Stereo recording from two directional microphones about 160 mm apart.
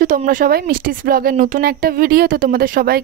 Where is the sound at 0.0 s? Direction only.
55° right (ahead or behind).